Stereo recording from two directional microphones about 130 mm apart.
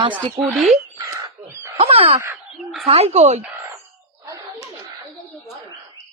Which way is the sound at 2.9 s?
50° right (ahead or behind).